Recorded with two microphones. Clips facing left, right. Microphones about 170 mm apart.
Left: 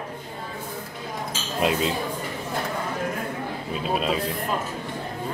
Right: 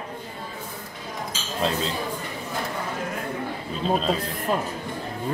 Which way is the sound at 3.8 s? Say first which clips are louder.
Right 2 dB; 10° left (ahead or behind).